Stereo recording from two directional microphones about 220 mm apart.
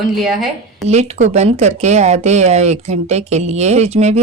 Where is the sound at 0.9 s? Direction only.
30° right (ahead or behind).